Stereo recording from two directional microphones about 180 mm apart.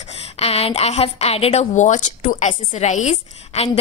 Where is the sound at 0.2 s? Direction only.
35° left (ahead or behind).